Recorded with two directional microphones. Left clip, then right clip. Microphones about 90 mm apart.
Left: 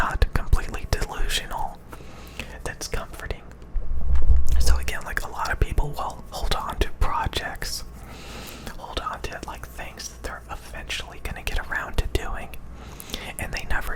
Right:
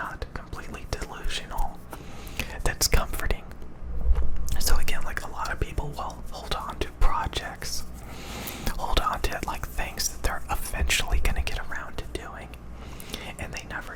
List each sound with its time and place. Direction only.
0.0 s whispering: 65° left (ahead or behind)
0.6 s whispering: 40° left (ahead or behind)
2.4 s whispering: 10° right (ahead or behind)
2.7 s whispering: 20° right (ahead or behind)
4.4 s whispering: centre (ahead or behind)
5.0 s whispering: 30° left (ahead or behind)
7.0 s whispering: 20° left (ahead or behind)
8.2 s a sound: 5° right (ahead or behind)
8.4 s whispering: 25° right (ahead or behind)
9.3 s whispering: 10° right (ahead or behind); by 11.3 s 30° right (ahead or behind)
11.7 s whispering: 55° left (ahead or behind)
13.1 s whispering: 20° left (ahead or behind)
13.6 s whispering: 45° left (ahead or behind)